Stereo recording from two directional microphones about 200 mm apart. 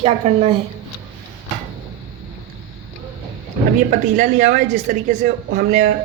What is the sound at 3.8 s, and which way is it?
A woman's voice, 40° right (ahead or behind).